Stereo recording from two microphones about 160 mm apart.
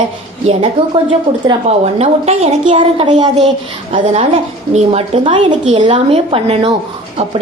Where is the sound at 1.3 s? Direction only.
40° right (ahead or behind).